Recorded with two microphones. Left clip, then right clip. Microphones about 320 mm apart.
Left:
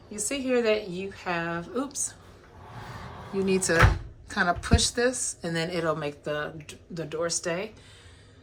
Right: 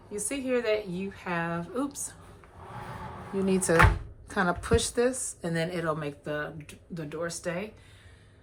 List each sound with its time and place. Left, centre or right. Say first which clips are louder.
0.1 s a woman's voice: left 2 dB; centre
3.3 s a woman's voice: even; centre